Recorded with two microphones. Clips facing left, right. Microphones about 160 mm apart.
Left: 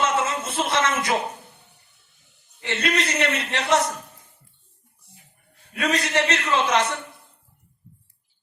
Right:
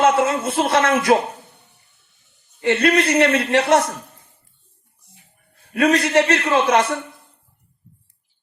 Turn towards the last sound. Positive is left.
turn(degrees=-60)  # may be behind; listen again after turning